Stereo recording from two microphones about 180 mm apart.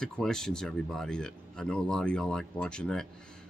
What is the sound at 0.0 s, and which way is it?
Speech, 5° left (ahead or behind).